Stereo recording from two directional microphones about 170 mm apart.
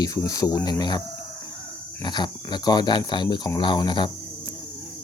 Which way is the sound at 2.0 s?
25° left (ahead or behind).